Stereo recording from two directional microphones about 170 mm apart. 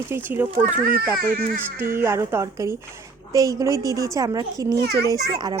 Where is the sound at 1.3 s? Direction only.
55° right (ahead or behind).